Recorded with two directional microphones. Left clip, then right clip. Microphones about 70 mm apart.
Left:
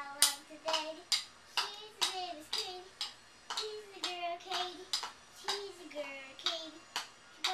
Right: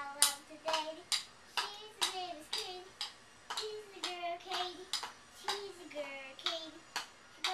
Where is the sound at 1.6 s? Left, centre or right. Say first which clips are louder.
Left 1 dB; centre.